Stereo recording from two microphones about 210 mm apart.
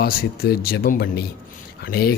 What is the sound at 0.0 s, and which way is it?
Speech, 45° left (ahead or behind).